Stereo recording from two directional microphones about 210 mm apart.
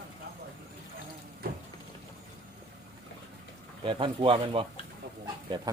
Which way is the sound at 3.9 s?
25° right (ahead or behind).